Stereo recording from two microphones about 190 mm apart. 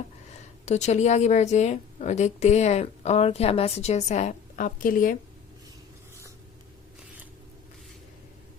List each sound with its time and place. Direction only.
0.6 s a woman's voice: 35° left (ahead or behind)